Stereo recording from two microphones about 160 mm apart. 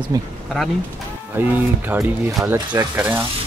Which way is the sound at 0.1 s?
20° right (ahead or behind).